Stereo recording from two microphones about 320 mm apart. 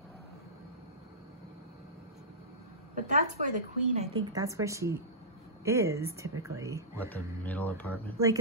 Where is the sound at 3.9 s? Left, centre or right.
Centre.